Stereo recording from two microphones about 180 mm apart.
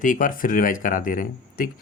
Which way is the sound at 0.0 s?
45° left (ahead or behind).